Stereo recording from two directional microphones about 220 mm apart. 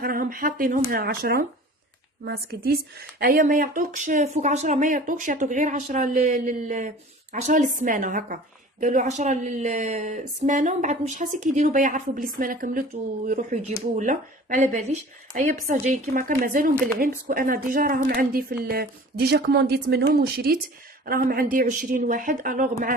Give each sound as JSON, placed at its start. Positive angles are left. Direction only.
{"t": 0.0, "sound": "speech", "side_deg": -40}